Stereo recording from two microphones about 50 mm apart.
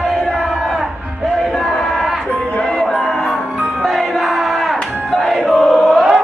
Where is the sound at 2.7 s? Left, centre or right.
Centre.